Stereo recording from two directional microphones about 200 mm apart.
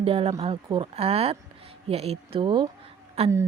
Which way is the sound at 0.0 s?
30° right (ahead or behind).